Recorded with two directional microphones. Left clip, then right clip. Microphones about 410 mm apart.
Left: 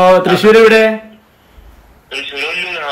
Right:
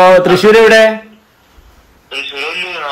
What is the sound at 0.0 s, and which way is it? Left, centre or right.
Speech, centre.